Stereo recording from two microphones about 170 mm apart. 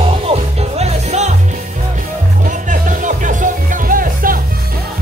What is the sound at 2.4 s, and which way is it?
Music, 50° right (ahead or behind).